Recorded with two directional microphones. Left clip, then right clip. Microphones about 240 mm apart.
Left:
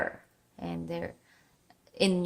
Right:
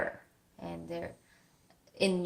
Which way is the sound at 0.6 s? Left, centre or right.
Left.